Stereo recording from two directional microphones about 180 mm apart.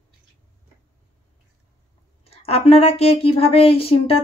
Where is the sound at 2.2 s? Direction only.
35° left (ahead or behind).